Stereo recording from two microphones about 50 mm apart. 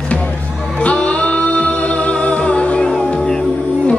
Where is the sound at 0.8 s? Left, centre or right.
Left.